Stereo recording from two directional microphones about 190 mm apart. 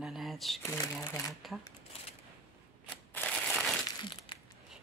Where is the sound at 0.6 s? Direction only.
15° left (ahead or behind).